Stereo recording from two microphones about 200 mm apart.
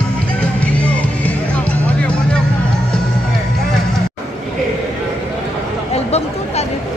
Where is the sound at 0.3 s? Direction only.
5° left (ahead or behind).